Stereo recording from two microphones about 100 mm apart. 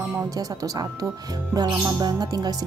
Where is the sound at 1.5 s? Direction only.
40° right (ahead or behind).